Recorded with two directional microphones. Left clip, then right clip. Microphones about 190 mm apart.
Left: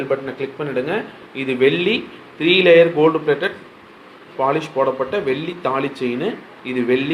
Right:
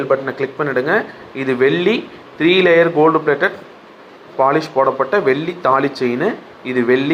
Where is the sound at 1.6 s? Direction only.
45° right (ahead or behind).